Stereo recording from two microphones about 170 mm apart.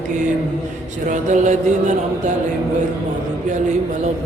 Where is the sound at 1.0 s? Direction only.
45° right (ahead or behind).